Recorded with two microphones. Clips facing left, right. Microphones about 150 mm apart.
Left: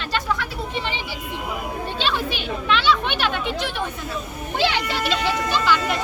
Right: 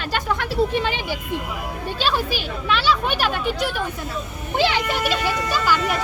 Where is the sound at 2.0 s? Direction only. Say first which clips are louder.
Right 3 dB; 40° right (ahead or behind).